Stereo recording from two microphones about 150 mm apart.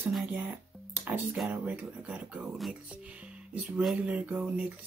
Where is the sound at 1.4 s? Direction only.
10° right (ahead or behind).